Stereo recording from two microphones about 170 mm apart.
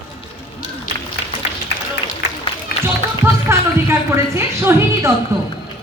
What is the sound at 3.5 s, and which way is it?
A man's voice, 15° right (ahead or behind).